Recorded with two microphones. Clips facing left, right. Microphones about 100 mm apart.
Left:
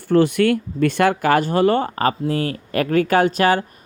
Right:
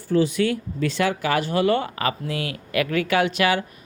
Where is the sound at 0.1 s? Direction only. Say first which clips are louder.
Left 5 dB; 60° left (ahead or behind).